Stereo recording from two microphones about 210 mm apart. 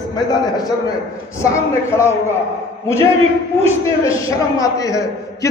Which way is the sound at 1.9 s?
15° left (ahead or behind).